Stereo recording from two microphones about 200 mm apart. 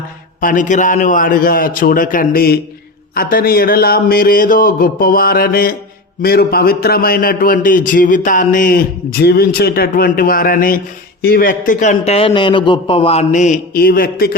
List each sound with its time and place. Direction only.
0.4 s a man's voice: 40° left (ahead or behind)